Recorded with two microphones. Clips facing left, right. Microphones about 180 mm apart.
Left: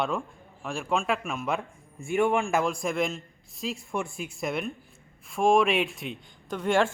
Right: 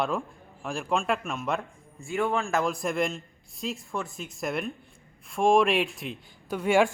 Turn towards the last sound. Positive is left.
turn(degrees=-10)  # may be behind; listen again after turning